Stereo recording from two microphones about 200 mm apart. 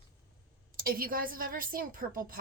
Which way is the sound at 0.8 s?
45° right (ahead or behind).